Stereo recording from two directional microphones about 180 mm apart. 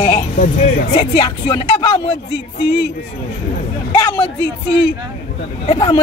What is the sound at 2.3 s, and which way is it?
Speech, 65° left (ahead or behind).